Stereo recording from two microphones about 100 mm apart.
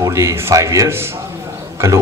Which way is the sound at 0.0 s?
30° right (ahead or behind).